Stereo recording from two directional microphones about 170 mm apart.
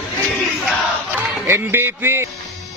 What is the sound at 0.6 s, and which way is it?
Battle cry, centre (ahead or behind).